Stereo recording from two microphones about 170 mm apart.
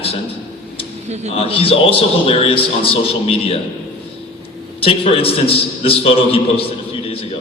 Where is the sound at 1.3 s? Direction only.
35° left (ahead or behind).